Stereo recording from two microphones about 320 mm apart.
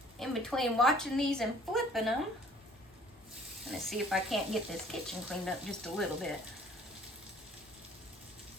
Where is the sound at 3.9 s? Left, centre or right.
Centre.